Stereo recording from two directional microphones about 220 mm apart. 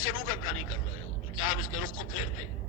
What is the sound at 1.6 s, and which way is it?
Speech, 65° left (ahead or behind).